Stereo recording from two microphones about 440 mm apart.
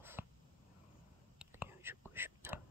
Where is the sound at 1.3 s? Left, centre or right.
Centre.